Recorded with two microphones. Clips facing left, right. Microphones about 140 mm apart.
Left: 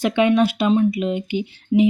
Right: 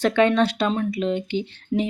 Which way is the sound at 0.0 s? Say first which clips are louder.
Left 1 dB; 10° left (ahead or behind).